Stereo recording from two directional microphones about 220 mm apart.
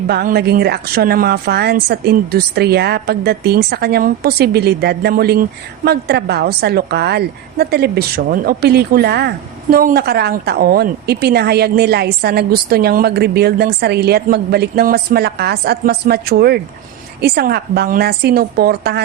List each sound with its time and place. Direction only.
0.1 s a woman's voice: 45° right (ahead or behind)